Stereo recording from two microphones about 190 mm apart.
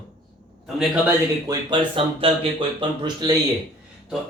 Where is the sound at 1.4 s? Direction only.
25° right (ahead or behind).